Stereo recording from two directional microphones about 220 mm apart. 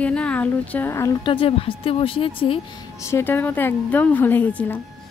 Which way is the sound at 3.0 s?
10° left (ahead or behind).